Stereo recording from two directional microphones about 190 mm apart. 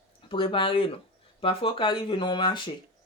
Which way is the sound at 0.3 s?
30° left (ahead or behind).